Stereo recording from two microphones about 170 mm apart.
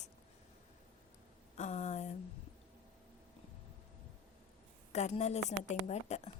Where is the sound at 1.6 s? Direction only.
40° left (ahead or behind).